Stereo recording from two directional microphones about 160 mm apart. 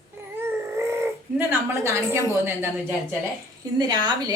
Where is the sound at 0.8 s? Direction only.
15° right (ahead or behind).